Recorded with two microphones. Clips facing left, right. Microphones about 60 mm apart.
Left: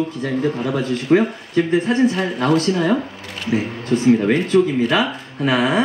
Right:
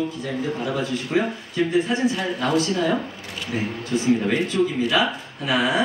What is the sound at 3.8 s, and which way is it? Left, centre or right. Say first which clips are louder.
Speech: left 6 dB; left.